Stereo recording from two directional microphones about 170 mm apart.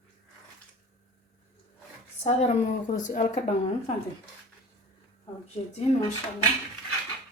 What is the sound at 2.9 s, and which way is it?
Speech, 50° left (ahead or behind).